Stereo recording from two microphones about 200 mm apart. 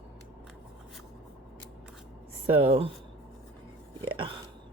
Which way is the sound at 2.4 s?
30° right (ahead or behind).